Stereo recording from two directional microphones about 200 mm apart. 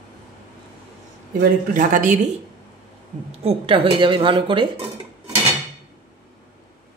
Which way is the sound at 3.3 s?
30° right (ahead or behind).